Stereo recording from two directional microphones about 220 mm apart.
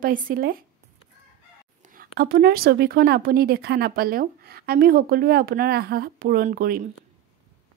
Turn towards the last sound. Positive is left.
turn(degrees=-40)  # may be behind; listen again after turning